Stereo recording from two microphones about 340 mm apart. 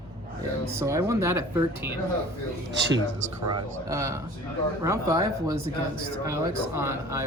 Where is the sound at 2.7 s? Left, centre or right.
Right.